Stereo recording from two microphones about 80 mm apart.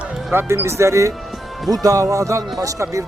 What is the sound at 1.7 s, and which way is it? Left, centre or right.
Speech, right.